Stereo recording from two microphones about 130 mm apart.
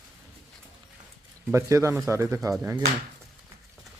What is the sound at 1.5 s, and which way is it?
Speech, 20° right (ahead or behind).